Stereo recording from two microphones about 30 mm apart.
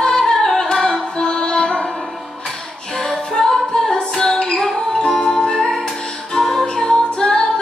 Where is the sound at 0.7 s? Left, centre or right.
Left.